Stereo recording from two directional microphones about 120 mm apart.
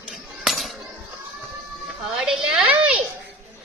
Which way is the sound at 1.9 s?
5° right (ahead or behind).